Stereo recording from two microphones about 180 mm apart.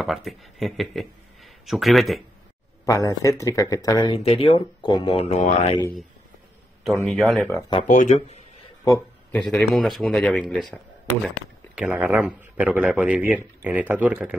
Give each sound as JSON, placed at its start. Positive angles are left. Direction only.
{"t": 0.0, "sound": "speech", "side_deg": 0}
{"t": 2.8, "sound": "speech", "side_deg": 20}
{"t": 6.8, "sound": "a man's voice", "side_deg": 0}
{"t": 7.8, "sound": "speech", "side_deg": 45}
{"t": 9.3, "sound": "a man's voice", "side_deg": 5}